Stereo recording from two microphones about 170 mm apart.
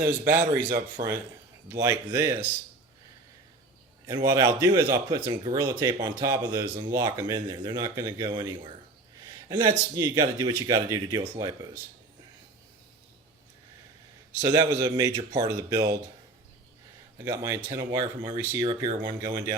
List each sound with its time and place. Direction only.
0.0 s speech: 50° right (ahead or behind)
1.7 s speech: 15° right (ahead or behind)
4.0 s speech: 20° right (ahead or behind)
14.4 s speech: 20° right (ahead or behind)
17.2 s speech: 15° right (ahead or behind)